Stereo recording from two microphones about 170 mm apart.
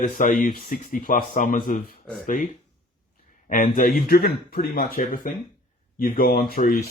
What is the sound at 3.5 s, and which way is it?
Speech, 55° left (ahead or behind).